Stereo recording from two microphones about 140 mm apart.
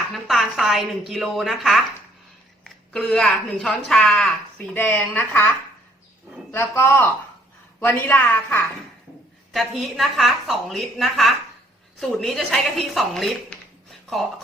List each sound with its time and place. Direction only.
0.3 s a woman's voice: centre (ahead or behind)
9.5 s a woman's voice: centre (ahead or behind)